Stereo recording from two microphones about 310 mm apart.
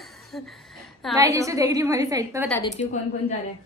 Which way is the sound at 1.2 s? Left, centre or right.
Centre.